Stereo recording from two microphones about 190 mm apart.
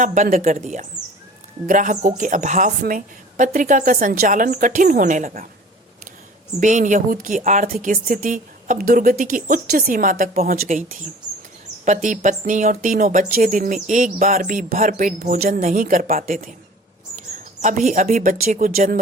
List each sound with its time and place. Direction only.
0.0 s speech: 40° right (ahead or behind)
6.6 s speech: 40° right (ahead or behind)
11.9 s speech: 40° right (ahead or behind)